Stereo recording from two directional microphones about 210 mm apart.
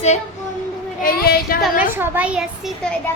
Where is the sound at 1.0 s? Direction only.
45° left (ahead or behind).